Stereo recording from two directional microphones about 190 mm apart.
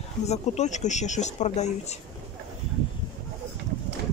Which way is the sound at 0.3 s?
40° left (ahead or behind).